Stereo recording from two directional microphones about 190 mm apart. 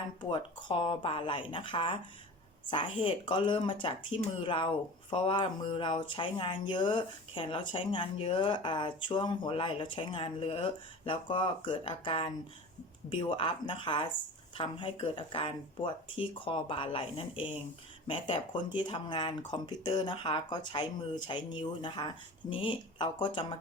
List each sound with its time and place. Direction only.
0.2 s speech: 25° left (ahead or behind)